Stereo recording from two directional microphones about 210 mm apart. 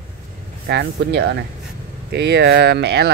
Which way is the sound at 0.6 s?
55° right (ahead or behind).